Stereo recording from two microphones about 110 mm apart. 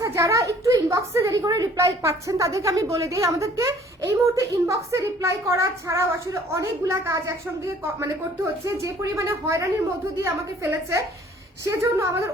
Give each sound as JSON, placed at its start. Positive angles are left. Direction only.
{"t": 0.0, "sound": "a woman's voice", "side_deg": -30}